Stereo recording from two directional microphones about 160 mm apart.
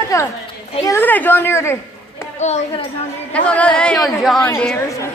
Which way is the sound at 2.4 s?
40° left (ahead or behind).